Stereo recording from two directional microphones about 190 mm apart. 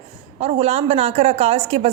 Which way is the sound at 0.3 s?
30° right (ahead or behind).